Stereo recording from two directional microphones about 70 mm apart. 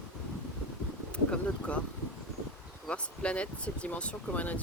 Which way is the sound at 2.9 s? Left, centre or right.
Centre.